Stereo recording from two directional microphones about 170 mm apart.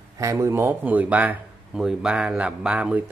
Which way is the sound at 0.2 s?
20° right (ahead or behind).